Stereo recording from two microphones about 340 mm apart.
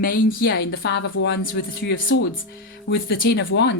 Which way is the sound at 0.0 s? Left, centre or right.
Left.